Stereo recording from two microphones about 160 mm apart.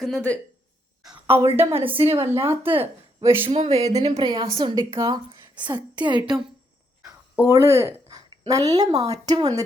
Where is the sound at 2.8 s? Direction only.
15° right (ahead or behind).